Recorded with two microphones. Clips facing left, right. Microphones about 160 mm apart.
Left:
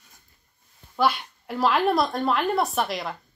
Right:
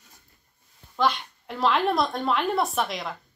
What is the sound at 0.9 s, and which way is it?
A woman's voice, 5° left (ahead or behind).